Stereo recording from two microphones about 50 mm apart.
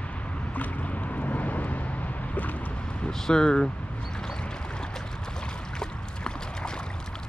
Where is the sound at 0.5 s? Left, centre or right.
Left.